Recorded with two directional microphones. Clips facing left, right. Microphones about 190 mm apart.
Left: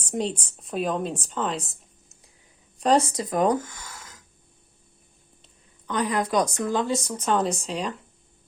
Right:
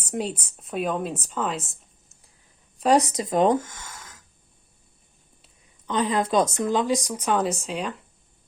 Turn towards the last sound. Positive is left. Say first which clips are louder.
# even
turn(degrees=0)  # may be behind; listen again after turning